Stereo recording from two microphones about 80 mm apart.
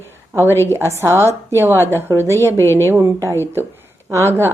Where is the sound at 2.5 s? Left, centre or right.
Left.